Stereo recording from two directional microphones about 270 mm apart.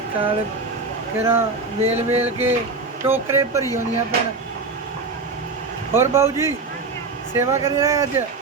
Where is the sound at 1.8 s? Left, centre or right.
Right.